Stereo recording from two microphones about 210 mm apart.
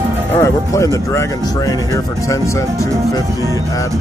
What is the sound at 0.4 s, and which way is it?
Speech, 15° left (ahead or behind).